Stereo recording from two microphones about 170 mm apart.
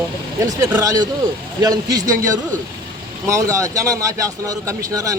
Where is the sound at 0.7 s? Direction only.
20° right (ahead or behind).